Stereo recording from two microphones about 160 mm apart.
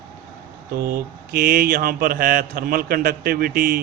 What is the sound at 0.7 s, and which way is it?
Mantra, 65° right (ahead or behind).